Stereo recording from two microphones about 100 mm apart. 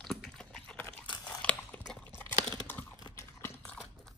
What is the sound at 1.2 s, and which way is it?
Biting, 10° left (ahead or behind).